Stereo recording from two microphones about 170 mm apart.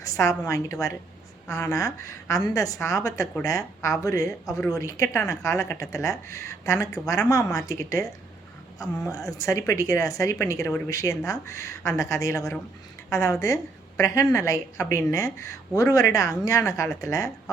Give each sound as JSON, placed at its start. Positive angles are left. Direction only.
{"t": 0.0, "sound": "a woman's voice", "side_deg": 20}
{"t": 9.1, "sound": "a woman's voice", "side_deg": 20}